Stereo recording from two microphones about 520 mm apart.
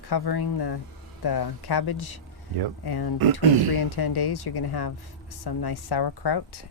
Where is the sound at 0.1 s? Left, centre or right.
Left.